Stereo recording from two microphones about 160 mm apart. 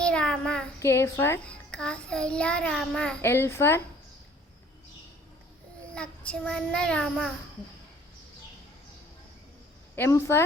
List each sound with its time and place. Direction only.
0.0 s child singing: 5° left (ahead or behind)
0.8 s a child's voice: 20° left (ahead or behind)
5.9 s a child's voice: 5° left (ahead or behind)
9.9 s a child's voice: 15° left (ahead or behind)